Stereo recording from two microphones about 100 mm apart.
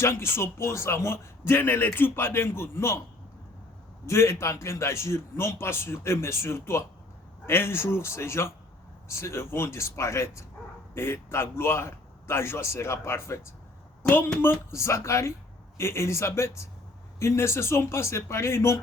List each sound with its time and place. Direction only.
0.0 s a man's voice: 25° left (ahead or behind)
4.0 s a man's voice: 25° left (ahead or behind)
14.4 s a man's voice: 25° left (ahead or behind)